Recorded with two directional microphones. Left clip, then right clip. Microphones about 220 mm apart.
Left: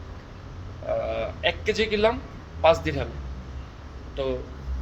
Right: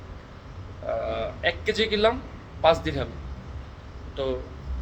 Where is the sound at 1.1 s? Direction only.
10° right (ahead or behind).